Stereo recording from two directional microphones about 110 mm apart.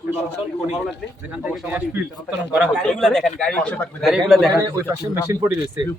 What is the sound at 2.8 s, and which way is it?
Speech, 5° left (ahead or behind).